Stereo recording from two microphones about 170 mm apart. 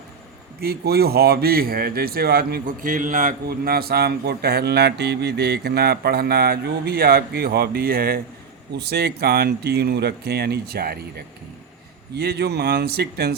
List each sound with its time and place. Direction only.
0.6 s a man's voice: 65° right (ahead or behind)
12.1 s speech: 70° right (ahead or behind)